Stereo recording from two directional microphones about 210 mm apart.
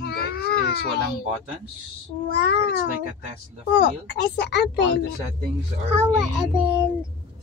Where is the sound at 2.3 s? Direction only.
50° left (ahead or behind).